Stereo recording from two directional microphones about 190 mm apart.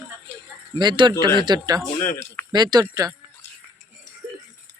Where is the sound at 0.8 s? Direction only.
25° right (ahead or behind).